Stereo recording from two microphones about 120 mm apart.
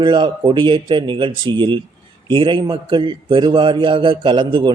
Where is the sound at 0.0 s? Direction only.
40° right (ahead or behind).